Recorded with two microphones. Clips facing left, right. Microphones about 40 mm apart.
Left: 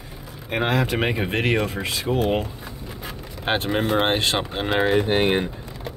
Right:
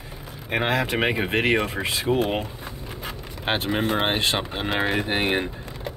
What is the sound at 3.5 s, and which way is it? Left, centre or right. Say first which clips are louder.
Speech: left 2 dB; centre.